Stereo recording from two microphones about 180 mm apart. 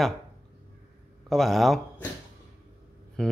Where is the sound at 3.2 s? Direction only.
5° left (ahead or behind).